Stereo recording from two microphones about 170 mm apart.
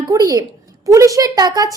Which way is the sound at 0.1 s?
20° right (ahead or behind).